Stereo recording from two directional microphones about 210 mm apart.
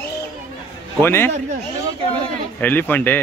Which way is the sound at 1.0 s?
10° left (ahead or behind).